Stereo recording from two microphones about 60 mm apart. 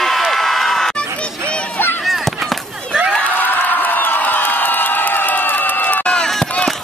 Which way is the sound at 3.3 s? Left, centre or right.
Left.